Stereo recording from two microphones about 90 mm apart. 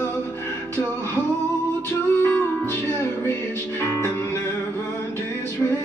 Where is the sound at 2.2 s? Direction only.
20° left (ahead or behind).